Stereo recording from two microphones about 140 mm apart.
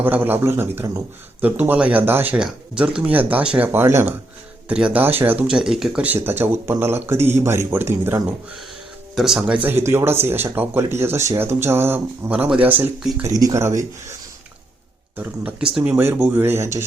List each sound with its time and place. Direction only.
0.0 s a man's voice: 15° right (ahead or behind)
9.1 s a man's voice: centre (ahead or behind)
13.2 s speech: 25° right (ahead or behind)
15.7 s a man's voice: 10° right (ahead or behind)